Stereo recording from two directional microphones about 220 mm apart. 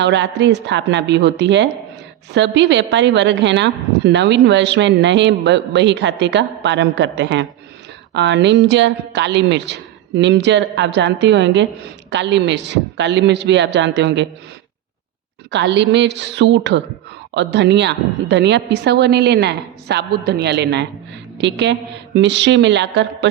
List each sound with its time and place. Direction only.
0.0 s a woman's voice: 55° right (ahead or behind)
15.4 s a woman's voice: 50° right (ahead or behind)